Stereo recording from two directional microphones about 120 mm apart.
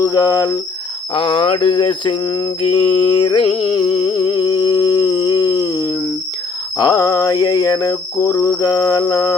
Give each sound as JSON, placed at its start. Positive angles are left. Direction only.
{"t": 0.0, "sound": "cricket", "side_deg": 30}
{"t": 1.1, "sound": "cricket", "side_deg": 45}
{"t": 2.6, "sound": "a sound", "side_deg": 50}
{"t": 6.7, "sound": "cricket", "side_deg": 30}